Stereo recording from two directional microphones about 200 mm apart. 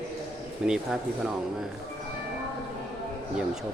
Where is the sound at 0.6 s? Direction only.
5° right (ahead or behind).